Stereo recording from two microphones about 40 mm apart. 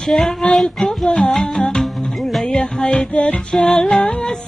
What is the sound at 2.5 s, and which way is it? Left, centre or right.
Music, left.